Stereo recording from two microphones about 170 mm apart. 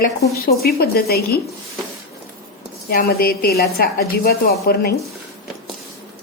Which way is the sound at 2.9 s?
60° left (ahead or behind).